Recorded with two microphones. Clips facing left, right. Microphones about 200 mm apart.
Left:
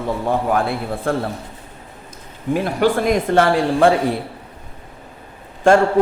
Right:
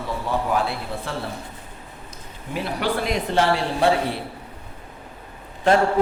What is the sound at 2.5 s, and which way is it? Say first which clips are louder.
A man's voice: left 8 dB; 45° left (ahead or behind).